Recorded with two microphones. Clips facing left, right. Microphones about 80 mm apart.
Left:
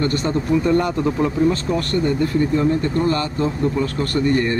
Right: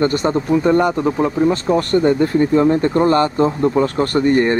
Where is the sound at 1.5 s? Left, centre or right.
Right.